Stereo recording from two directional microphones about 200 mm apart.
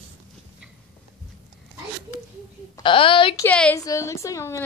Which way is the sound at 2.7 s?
25° left (ahead or behind).